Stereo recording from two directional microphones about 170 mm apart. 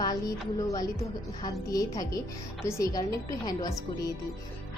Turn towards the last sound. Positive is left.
turn(degrees=20)  # may be behind; listen again after turning